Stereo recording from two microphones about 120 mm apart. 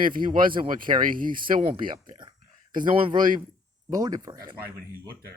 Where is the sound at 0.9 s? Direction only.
45° right (ahead or behind).